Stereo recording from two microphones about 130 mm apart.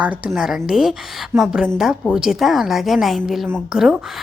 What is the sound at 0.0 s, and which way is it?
A woman's voice, 10° right (ahead or behind).